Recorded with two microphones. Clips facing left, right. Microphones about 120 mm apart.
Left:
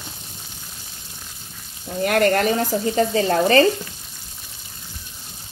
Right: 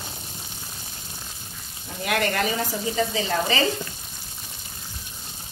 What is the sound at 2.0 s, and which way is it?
Frying, 45° left (ahead or behind).